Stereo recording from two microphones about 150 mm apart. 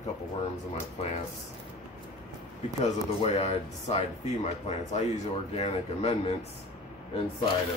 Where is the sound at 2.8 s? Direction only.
50° left (ahead or behind).